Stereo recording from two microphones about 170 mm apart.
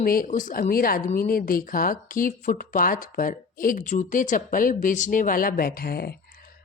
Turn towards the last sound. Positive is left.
turn(degrees=65)  # may be behind; listen again after turning